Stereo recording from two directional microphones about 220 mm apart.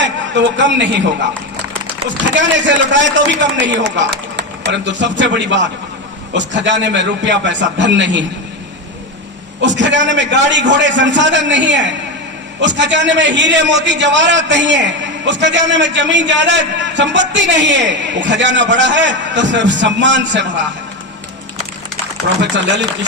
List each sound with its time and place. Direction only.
0.0 s a man's voice: 55° right (ahead or behind)
2.3 s a man's voice: 55° right (ahead or behind)
9.6 s a man's voice: 55° right (ahead or behind)